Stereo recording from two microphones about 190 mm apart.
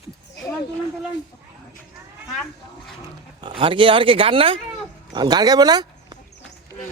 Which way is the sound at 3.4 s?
30° right (ahead or behind).